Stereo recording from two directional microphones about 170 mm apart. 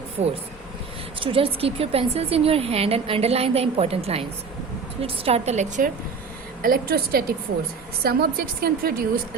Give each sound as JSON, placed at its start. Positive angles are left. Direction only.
{"t": 0.2, "sound": "a woman's voice", "side_deg": -40}
{"t": 6.6, "sound": "a woman's voice", "side_deg": -60}